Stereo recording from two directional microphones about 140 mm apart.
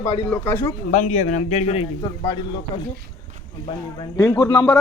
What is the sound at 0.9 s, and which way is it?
Speech, 60° left (ahead or behind).